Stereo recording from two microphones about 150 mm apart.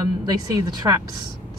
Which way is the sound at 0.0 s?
25° right (ahead or behind).